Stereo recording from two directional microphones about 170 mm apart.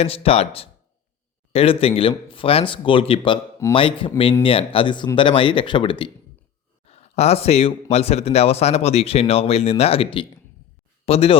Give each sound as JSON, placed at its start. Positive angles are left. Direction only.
{"t": 0.0, "sound": "speech", "side_deg": 35}